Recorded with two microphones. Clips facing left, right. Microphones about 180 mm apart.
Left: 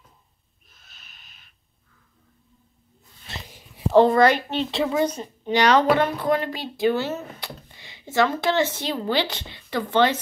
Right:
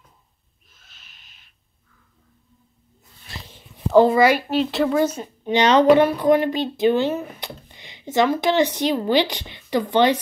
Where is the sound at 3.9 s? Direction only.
5° right (ahead or behind).